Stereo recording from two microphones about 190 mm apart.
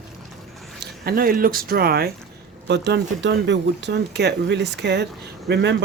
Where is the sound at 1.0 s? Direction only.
50° right (ahead or behind).